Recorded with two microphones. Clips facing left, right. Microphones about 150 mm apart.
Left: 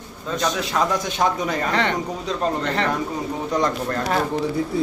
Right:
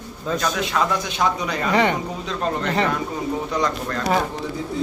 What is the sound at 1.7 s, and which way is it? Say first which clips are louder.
Speech: right 6 dB; 10° right (ahead or behind).